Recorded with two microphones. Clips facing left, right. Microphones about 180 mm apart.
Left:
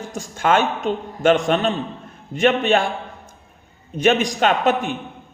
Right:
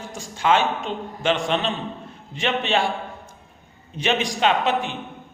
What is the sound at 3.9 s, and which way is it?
A man's voice, 45° left (ahead or behind).